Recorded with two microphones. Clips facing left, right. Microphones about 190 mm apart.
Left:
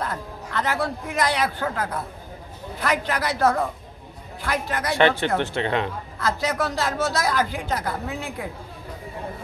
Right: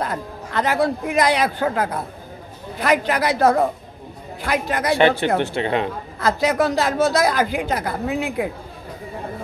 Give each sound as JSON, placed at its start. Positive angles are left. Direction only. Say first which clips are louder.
{"t": 0.0, "sound": "speech", "louder": "right 4 dB", "side_deg": -15}